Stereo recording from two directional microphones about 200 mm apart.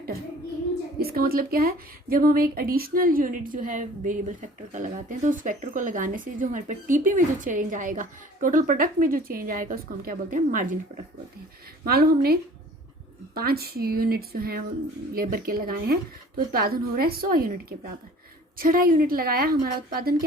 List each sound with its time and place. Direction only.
0.9 s speech: 50° right (ahead or behind)
11.9 s speech: 50° right (ahead or behind)